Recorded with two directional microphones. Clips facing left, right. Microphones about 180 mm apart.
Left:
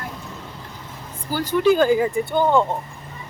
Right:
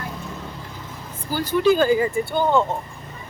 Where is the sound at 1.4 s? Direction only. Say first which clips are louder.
Left 1 dB; 15° left (ahead or behind).